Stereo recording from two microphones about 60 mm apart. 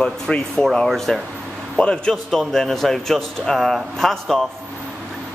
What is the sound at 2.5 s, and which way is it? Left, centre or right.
Speech, centre.